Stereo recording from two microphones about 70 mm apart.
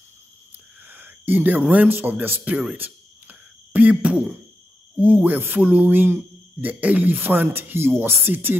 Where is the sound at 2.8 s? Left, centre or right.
Right.